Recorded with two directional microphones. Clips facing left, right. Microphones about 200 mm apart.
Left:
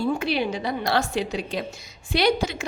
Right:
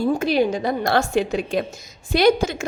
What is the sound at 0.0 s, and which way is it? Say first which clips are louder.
A woman's voice: right 5 dB; 45° right (ahead or behind).